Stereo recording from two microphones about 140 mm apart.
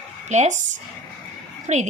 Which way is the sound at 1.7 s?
55° right (ahead or behind).